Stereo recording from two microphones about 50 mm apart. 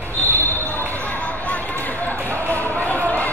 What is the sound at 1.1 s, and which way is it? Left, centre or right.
Basketball bounce, left.